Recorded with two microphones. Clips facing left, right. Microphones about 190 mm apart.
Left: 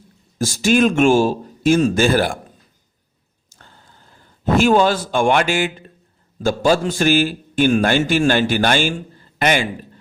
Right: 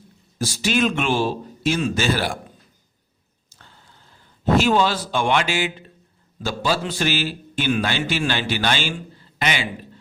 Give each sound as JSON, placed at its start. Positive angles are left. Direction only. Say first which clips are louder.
{"t": 0.3, "sound": "a man's voice", "louder": "left 6 dB", "side_deg": 45}
{"t": 3.5, "sound": "a sound", "louder": "left 3 dB", "side_deg": 45}
{"t": 4.5, "sound": "a man's voice", "louder": "left 4 dB", "side_deg": 50}